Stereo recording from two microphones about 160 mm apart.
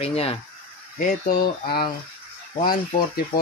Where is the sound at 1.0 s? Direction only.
65° left (ahead or behind).